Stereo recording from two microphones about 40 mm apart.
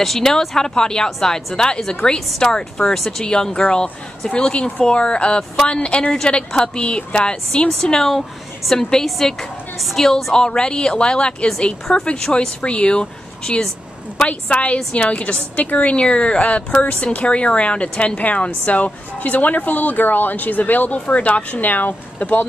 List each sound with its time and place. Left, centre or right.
0.2 s a woman's voice: centre
7.8 s a woman's voice: centre; by 16.0 s left
16.0 s speech: left